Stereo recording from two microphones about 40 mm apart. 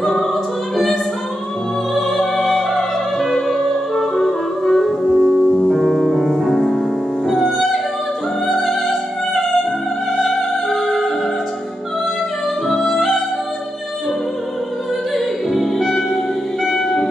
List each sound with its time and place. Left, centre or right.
0.0 s music: centre
2.0 s opera: centre
3.6 s music: centre
5.1 s music: centre
12.6 s music: centre
15.1 s opera: centre
16.6 s music: centre